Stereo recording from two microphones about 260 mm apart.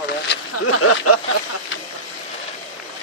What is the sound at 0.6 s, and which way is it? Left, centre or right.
Speech, left.